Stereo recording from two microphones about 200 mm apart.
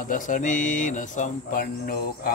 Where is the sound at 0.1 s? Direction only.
40° left (ahead or behind).